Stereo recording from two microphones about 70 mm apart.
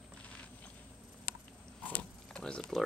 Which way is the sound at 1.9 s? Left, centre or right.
Centre.